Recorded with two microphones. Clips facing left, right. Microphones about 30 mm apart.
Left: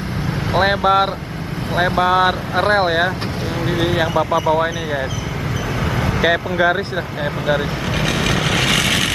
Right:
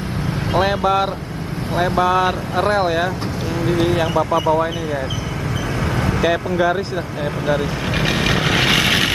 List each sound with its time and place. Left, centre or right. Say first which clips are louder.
0.5 s speech: left 2 dB; left
3.8 s speech: left 2 dB; left
6.2 s speech: left 2 dB; left
8.0 s vehicle: right 1 dB; centre